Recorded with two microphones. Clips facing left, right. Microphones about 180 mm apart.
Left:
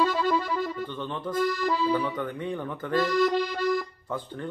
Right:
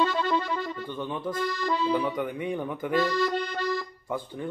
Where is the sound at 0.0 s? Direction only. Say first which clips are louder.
Left 1 dB; 5° left (ahead or behind).